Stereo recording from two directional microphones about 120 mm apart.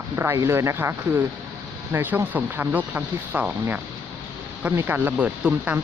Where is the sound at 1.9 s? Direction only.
15° right (ahead or behind).